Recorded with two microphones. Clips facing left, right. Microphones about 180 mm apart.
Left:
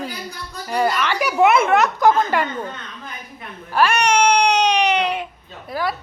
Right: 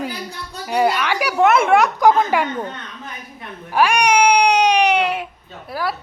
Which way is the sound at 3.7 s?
10° right (ahead or behind).